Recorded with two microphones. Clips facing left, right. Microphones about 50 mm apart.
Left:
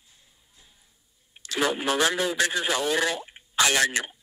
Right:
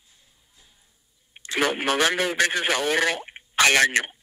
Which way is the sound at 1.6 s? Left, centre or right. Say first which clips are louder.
Right 2 dB; right.